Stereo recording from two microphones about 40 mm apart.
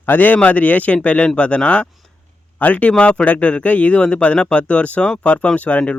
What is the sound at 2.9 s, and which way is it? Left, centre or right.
Speech, left.